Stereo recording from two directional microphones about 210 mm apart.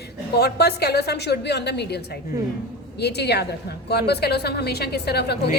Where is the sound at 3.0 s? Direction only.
50° left (ahead or behind).